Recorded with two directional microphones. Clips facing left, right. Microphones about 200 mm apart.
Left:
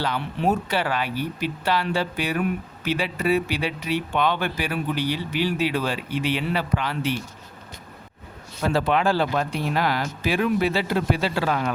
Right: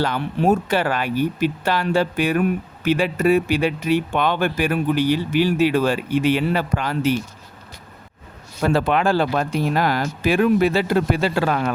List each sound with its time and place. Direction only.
0.0 s speech: 50° right (ahead or behind)
8.6 s speech: 55° right (ahead or behind)